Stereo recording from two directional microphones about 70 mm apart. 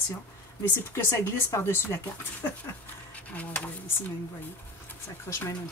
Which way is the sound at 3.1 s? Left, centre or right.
Centre.